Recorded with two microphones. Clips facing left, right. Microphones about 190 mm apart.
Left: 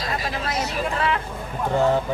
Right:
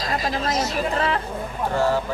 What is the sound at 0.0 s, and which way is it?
Speech, 40° right (ahead or behind).